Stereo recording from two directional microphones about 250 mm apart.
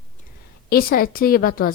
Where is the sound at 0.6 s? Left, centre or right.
Left.